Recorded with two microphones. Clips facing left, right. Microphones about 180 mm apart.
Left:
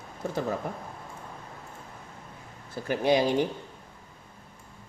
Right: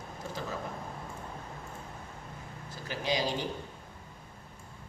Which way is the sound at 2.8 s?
55° left (ahead or behind).